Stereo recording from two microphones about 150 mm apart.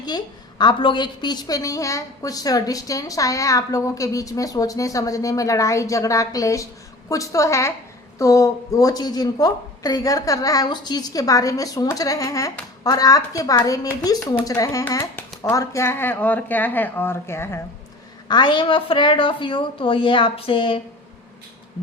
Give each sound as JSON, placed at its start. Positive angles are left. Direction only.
{"t": 0.6, "sound": "a woman's voice", "side_deg": 30}
{"t": 18.3, "sound": "a woman's voice", "side_deg": 30}